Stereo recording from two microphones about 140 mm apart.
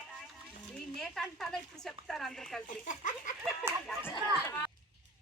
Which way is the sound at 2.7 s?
65° left (ahead or behind).